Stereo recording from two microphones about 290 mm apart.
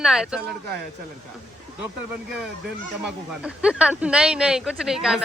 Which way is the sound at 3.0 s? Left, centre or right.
Centre.